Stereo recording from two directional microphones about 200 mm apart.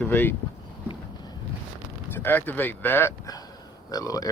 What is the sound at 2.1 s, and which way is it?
Speech, 10° left (ahead or behind).